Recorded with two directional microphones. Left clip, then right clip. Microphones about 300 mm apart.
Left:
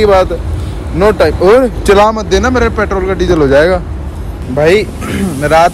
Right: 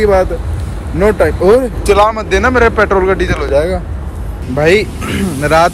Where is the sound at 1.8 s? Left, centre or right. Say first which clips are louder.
Left 1 dB; left.